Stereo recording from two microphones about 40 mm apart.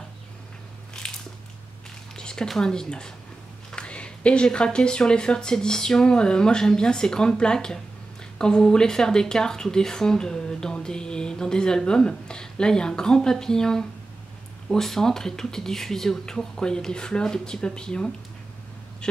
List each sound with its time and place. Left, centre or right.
1.0 s biting: centre
2.1 s a sound: centre
2.6 s speech: centre